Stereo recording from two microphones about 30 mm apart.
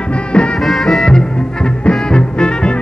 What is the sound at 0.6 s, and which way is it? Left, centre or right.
Music, centre.